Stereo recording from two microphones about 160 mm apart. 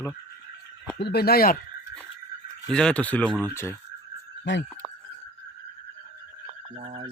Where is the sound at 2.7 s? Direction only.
5° left (ahead or behind).